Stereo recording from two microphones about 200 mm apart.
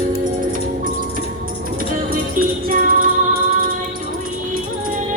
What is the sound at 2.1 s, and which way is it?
Music, 45° right (ahead or behind).